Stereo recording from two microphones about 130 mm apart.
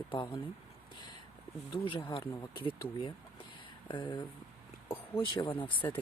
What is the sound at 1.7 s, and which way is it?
Speech, 40° left (ahead or behind).